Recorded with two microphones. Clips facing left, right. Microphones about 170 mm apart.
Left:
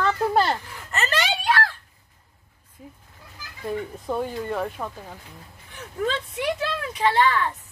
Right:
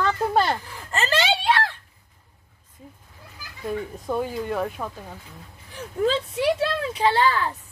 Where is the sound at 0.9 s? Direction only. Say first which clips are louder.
Right 3 dB; 30° right (ahead or behind).